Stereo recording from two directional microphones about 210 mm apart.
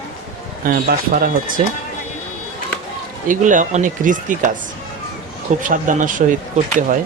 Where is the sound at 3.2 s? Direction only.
40° right (ahead or behind).